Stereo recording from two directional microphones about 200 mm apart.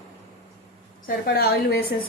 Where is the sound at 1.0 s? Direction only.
50° left (ahead or behind).